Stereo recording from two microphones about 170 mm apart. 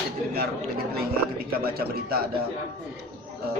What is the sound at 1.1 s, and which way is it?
A man's voice, 65° right (ahead or behind).